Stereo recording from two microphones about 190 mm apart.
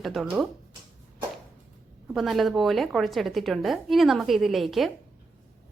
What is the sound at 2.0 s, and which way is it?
Speech, centre (ahead or behind).